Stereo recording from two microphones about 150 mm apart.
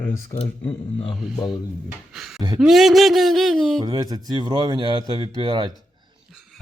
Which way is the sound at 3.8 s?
25° right (ahead or behind).